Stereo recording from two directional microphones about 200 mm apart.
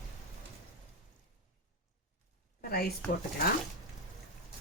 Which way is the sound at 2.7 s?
50° left (ahead or behind).